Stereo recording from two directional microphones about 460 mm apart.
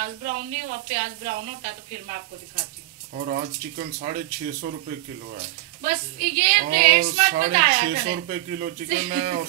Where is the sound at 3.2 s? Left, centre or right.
Centre.